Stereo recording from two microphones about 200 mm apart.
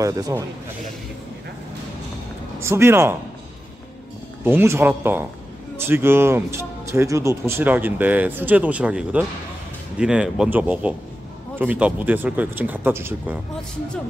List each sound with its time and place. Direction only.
0.0 s speech: 15° right (ahead or behind)
2.6 s speech: 10° right (ahead or behind)
4.5 s speech: 10° right (ahead or behind)